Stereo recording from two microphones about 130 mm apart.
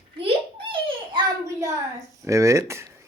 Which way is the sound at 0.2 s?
45° right (ahead or behind).